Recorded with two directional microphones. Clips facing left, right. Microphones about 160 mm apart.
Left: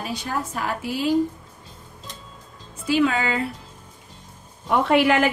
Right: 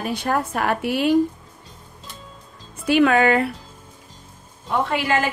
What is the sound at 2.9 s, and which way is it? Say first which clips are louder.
Speech: right 5 dB; 65° right (ahead or behind).